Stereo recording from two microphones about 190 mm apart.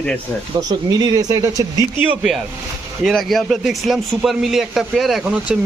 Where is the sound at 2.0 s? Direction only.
5° right (ahead or behind).